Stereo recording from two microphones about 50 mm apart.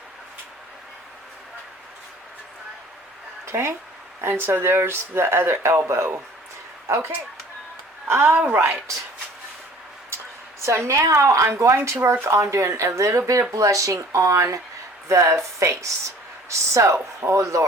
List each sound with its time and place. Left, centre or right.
3.4 s speech: right
8.0 s speech: right
8.3 s a woman's voice: right
10.6 s a woman's voice: right
12.3 s speech: right
15.0 s a woman's voice: right